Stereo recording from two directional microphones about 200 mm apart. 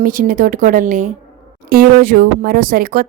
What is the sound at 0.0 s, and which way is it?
A woman's voice, 45° right (ahead or behind).